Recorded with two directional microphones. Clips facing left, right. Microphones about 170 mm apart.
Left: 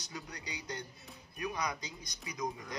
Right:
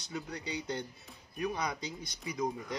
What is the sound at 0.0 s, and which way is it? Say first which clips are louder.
Speech: right 6 dB; 30° right (ahead or behind).